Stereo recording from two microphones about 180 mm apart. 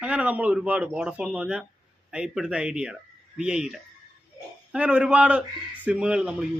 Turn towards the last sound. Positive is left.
turn(degrees=-5)  # may be behind; listen again after turning